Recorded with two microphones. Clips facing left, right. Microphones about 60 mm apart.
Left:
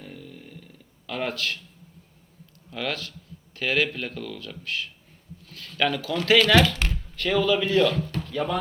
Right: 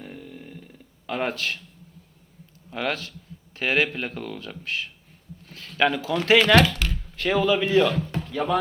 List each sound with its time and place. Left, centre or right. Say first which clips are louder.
0.0 s a sound: right 2 dB; right
1.0 s speech: right 2 dB; right
2.6 s speech: right 3 dB; right